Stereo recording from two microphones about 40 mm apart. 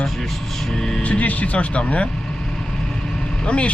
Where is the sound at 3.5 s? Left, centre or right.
Left.